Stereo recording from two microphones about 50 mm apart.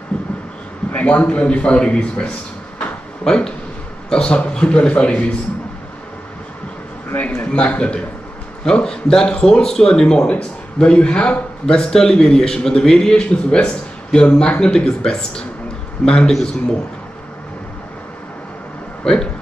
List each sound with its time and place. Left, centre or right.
0.1 s a sound: left
0.9 s a man's voice: left
7.2 s a man's voice: left
19.1 s speech: centre